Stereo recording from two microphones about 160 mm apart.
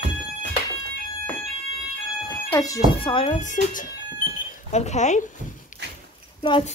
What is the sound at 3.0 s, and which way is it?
Speech, 35° left (ahead or behind).